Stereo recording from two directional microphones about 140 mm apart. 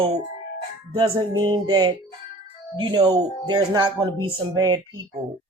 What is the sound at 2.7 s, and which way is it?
Speech, 30° right (ahead or behind).